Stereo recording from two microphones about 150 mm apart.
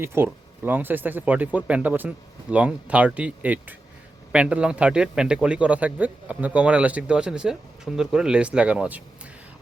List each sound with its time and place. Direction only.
0.0 s a man's voice: 15° right (ahead or behind)